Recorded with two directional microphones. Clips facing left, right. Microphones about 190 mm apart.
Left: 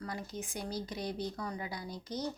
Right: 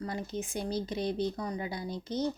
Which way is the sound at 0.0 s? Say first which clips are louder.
Right 5 dB; 25° right (ahead or behind).